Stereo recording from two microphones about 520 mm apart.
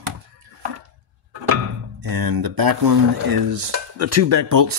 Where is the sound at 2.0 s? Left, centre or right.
Right.